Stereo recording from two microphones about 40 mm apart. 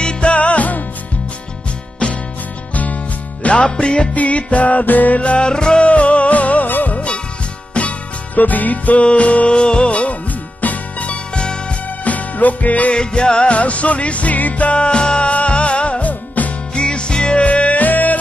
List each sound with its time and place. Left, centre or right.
0.0 s music: left
2.7 s music: left
3.6 s music: left
4.1 s music: left
5.2 s music: left
7.8 s music: left
8.4 s music: left
9.5 s music: left
12.0 s music: left
12.9 s music: left
14.7 s music: left
16.7 s music: left
17.4 s music: left